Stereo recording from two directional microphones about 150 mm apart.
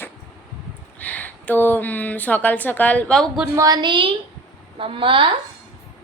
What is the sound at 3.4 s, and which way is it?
A woman's voice, 25° right (ahead or behind).